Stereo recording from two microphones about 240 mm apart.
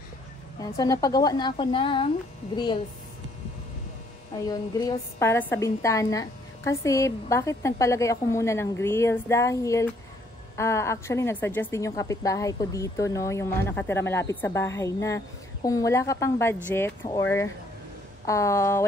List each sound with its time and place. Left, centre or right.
0.6 s a woman's voice: centre
4.5 s a woman's voice: centre